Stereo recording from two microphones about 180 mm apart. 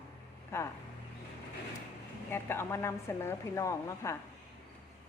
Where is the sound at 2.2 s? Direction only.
10° left (ahead or behind).